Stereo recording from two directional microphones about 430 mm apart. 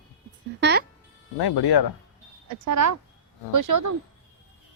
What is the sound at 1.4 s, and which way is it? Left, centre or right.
Speech, left.